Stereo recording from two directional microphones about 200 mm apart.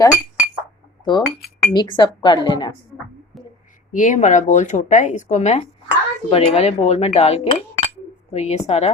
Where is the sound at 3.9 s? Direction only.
40° left (ahead or behind).